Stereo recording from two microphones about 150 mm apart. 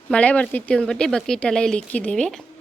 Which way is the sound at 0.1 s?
10° left (ahead or behind).